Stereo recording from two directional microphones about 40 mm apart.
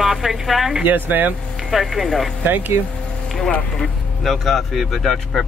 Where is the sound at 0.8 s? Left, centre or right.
Right.